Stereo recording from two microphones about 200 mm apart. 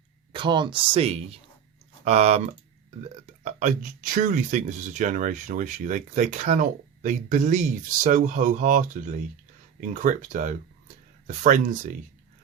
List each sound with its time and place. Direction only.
0.3 s speech: 25° right (ahead or behind); by 11.9 s 40° right (ahead or behind)